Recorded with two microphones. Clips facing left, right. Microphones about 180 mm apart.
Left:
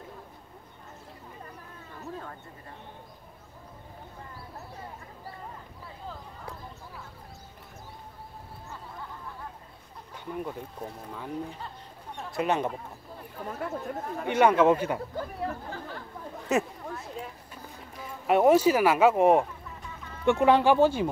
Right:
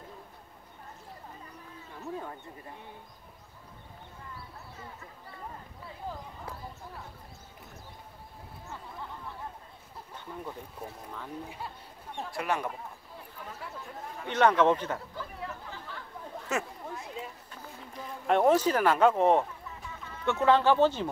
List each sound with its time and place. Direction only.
10.1 s a sound: 15° left (ahead or behind)
12.3 s speech: 20° left (ahead or behind)
13.4 s speech: 50° left (ahead or behind)
14.3 s speech: 10° left (ahead or behind)
15.1 s speech: 45° left (ahead or behind)
16.5 s speech: 20° left (ahead or behind)
18.2 s speech: 10° left (ahead or behind)